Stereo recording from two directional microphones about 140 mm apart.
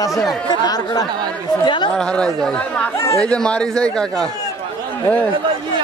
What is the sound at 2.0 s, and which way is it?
A man's voice, 5° left (ahead or behind).